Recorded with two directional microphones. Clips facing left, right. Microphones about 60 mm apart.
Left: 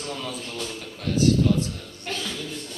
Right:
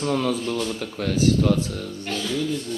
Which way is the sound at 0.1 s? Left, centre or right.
Right.